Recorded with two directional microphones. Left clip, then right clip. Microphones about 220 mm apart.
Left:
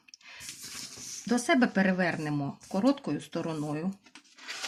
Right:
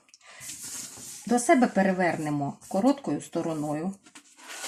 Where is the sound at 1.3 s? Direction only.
35° left (ahead or behind).